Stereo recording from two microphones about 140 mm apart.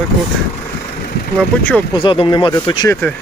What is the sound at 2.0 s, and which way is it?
Speech, 35° left (ahead or behind).